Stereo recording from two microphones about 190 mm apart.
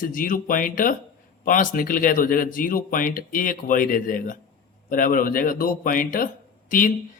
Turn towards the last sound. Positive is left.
turn(degrees=45)  # may be behind; listen again after turning